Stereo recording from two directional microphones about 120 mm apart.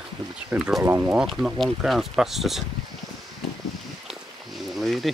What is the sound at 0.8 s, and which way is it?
Speech, 15° right (ahead or behind).